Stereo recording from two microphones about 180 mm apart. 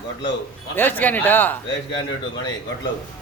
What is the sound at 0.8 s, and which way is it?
Speech, 10° left (ahead or behind).